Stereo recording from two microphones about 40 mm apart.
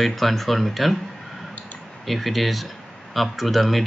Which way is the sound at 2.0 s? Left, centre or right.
Centre.